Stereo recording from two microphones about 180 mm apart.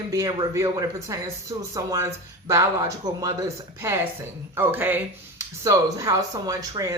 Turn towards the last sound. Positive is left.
turn(degrees=-20)  # may be behind; listen again after turning